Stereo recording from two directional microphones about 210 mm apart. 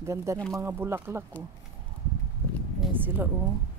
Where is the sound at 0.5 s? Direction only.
10° right (ahead or behind).